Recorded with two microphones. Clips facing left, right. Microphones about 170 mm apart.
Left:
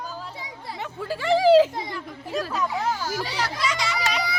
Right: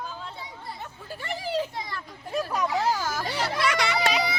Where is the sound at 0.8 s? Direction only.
90° left.